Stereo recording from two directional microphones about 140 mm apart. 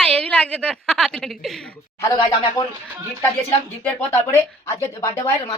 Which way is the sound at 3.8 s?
15° left (ahead or behind).